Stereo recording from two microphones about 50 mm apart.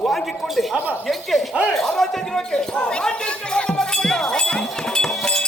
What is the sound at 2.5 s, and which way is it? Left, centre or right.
Speech, centre.